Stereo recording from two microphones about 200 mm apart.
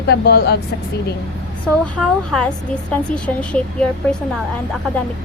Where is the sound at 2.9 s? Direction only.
5° left (ahead or behind).